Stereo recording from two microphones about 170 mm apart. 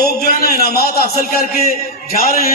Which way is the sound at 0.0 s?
65° left (ahead or behind).